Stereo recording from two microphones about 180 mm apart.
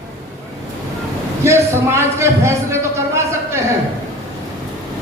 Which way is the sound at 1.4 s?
15° right (ahead or behind).